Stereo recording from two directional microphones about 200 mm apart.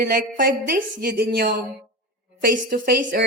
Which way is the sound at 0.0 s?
45° right (ahead or behind).